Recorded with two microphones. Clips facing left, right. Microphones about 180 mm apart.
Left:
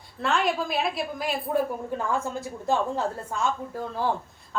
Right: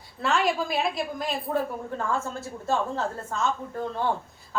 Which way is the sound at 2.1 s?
15° left (ahead or behind).